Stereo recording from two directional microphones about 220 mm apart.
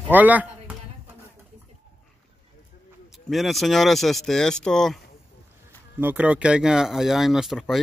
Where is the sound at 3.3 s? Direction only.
Centre (ahead or behind).